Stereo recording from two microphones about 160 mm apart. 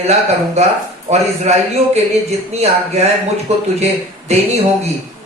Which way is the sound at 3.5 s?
45° right (ahead or behind).